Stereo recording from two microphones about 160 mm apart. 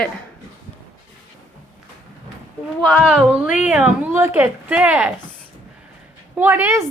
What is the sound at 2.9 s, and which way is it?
A woman's voice, centre (ahead or behind).